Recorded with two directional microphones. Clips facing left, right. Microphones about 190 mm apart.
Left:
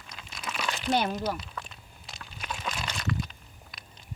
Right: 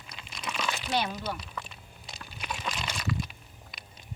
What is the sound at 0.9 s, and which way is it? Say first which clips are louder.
Speech: left 4 dB; 45° left (ahead or behind).